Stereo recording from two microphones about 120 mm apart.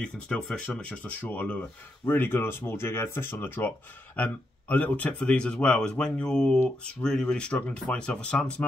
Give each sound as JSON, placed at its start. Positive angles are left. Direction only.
{"t": 0.0, "sound": "speech", "side_deg": 10}